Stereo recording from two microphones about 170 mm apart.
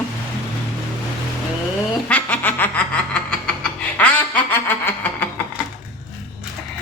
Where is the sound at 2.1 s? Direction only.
10° left (ahead or behind).